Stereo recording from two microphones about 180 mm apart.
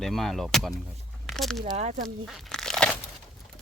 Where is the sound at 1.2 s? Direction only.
Centre (ahead or behind).